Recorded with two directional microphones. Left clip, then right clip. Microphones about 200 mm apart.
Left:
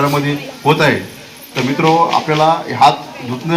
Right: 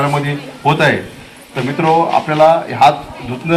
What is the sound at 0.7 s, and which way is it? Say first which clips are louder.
Speech: even; 25° right (ahead or behind).